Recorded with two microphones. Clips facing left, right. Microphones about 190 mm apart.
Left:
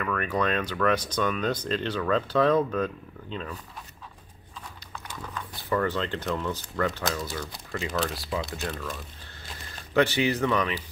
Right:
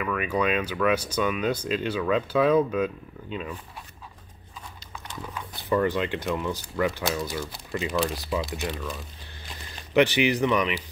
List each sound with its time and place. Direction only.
0.0 s speech: 10° right (ahead or behind)
5.2 s speech: 15° right (ahead or behind)
8.6 s speech: 5° right (ahead or behind)
9.9 s speech: 15° right (ahead or behind)